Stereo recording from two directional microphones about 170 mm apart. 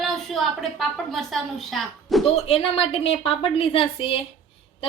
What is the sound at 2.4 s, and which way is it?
A woman's voice, 35° left (ahead or behind).